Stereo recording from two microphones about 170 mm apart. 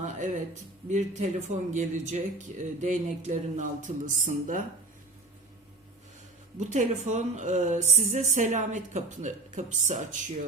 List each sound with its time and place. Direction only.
0.0 s a woman's voice: 45° right (ahead or behind)
6.6 s a woman's voice: 45° right (ahead or behind)